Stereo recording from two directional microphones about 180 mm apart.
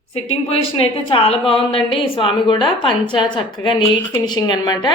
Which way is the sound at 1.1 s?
30° left (ahead or behind).